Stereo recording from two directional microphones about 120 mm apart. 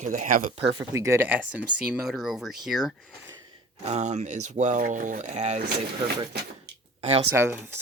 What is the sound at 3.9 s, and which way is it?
Speech, 75° right (ahead or behind).